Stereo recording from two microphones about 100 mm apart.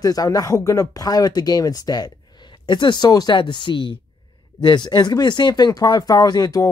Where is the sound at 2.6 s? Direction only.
50° left (ahead or behind).